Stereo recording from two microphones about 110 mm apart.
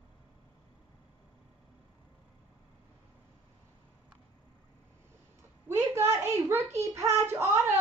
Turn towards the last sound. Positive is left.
turn(degrees=-25)  # may be behind; listen again after turning